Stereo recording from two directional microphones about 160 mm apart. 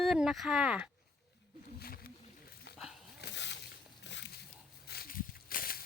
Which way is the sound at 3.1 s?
90° left.